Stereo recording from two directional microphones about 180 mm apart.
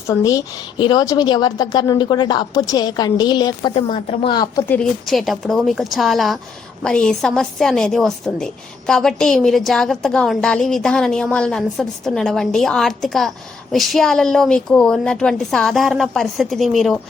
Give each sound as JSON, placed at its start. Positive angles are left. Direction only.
{"t": 0.1, "sound": "a woman's voice", "side_deg": 20}
{"t": 4.7, "sound": "a woman's voice", "side_deg": 5}